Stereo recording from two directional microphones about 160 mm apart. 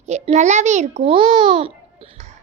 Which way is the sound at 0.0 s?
45° right (ahead or behind).